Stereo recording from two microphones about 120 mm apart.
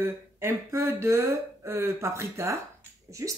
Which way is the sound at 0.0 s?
25° right (ahead or behind).